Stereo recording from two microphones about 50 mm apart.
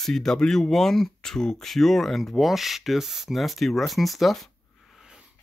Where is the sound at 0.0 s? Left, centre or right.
Centre.